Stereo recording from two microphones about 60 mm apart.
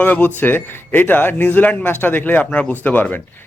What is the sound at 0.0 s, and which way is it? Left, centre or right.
Speech, left.